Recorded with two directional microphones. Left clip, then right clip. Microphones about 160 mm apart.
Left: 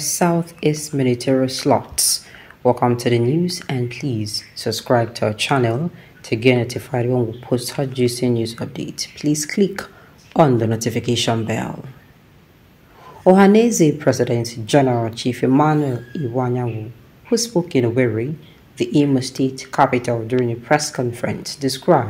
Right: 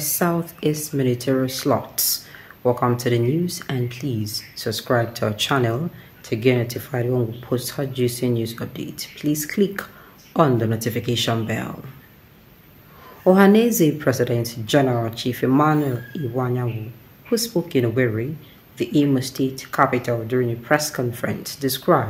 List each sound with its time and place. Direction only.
0.0 s speech: 10° left (ahead or behind)
13.2 s speech: 10° left (ahead or behind)